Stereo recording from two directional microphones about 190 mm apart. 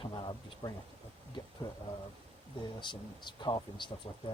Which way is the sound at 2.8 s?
25° left (ahead or behind).